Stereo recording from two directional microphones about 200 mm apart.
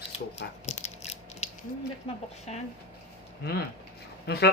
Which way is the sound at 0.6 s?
35° left (ahead or behind).